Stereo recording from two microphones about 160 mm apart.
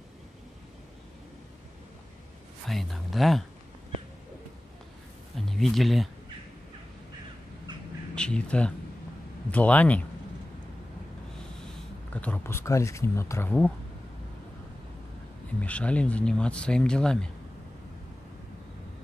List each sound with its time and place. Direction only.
2.6 s speech: centre (ahead or behind)
5.3 s a sound: centre (ahead or behind)
8.1 s speech: 5° left (ahead or behind)
11.6 s speech: 10° left (ahead or behind)
15.6 s speech: 10° left (ahead or behind)